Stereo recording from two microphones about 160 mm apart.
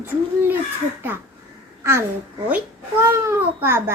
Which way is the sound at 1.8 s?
15° right (ahead or behind).